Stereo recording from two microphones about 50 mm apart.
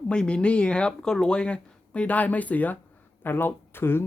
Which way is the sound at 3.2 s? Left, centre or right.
Left.